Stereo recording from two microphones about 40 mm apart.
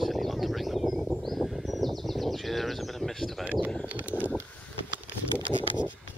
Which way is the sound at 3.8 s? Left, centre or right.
Right.